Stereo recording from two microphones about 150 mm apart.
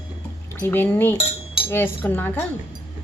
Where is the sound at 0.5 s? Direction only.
15° left (ahead or behind).